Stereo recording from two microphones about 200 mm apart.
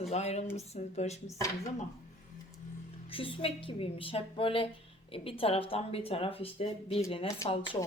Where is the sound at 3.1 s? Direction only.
25° left (ahead or behind).